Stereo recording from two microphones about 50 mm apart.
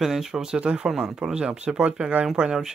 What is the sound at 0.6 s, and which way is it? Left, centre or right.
Speech, right.